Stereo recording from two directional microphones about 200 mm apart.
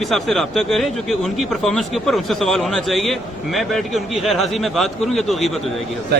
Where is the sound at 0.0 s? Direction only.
Centre (ahead or behind).